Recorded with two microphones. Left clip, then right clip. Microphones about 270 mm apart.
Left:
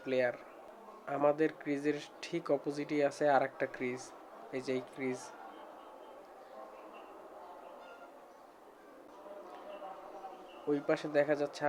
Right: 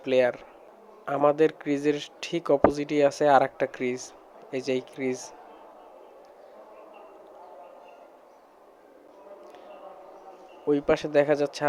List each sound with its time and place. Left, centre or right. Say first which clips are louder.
0.0 s speech: right 10 dB; right
10.7 s speech: right 9 dB; right